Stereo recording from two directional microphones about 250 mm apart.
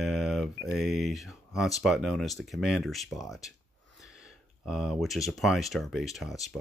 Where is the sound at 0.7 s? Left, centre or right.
Centre.